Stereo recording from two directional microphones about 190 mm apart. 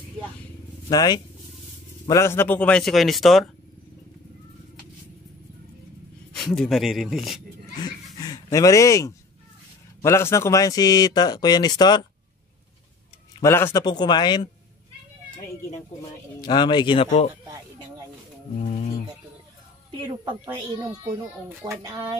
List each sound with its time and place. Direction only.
0.8 s a man's voice: 20° left (ahead or behind); by 3.4 s centre (ahead or behind)
6.3 s speech: centre (ahead or behind)
7.8 s chicken: 20° left (ahead or behind)
10.0 s a man's voice: 15° left (ahead or behind)
13.4 s a man's voice: 15° left (ahead or behind)
16.3 s a man's voice: 25° left (ahead or behind)
18.6 s speech: 35° left (ahead or behind)
20.4 s a child's voice: 15° right (ahead or behind)